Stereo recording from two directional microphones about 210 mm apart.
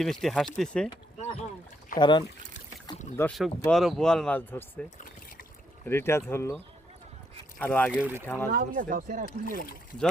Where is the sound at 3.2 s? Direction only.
5° left (ahead or behind).